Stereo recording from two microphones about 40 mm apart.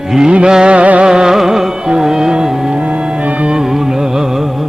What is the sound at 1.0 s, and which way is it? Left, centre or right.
Music, centre.